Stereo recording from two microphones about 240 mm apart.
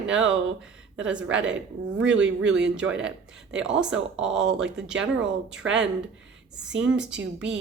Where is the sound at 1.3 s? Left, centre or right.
Right.